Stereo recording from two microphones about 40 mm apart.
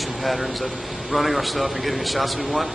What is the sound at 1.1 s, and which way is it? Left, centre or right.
Speech, centre.